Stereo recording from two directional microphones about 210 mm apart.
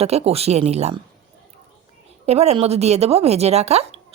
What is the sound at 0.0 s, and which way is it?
Speech, 30° right (ahead or behind).